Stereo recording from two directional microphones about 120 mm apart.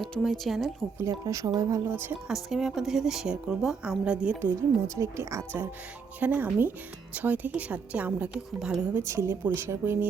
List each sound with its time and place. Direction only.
0.0 s a woman's voice: centre (ahead or behind)
0.9 s speech: 25° right (ahead or behind)
1.9 s speech: 20° right (ahead or behind)
2.2 s a woman's voice: 5° right (ahead or behind)
4.9 s speech: 25° right (ahead or behind)
6.1 s a woman's voice: 15° right (ahead or behind)
9.0 s speech: 25° right (ahead or behind)